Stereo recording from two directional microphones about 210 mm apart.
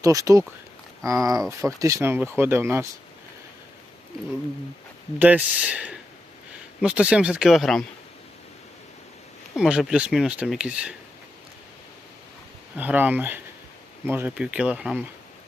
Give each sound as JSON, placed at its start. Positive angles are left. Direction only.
{"t": 0.0, "sound": "speech", "side_deg": -15}
{"t": 5.2, "sound": "speech", "side_deg": -5}
{"t": 9.6, "sound": "speech", "side_deg": -5}
{"t": 12.7, "sound": "speech", "side_deg": -10}